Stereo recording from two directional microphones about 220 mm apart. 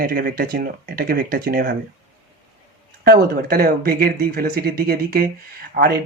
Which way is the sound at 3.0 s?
45° right (ahead or behind).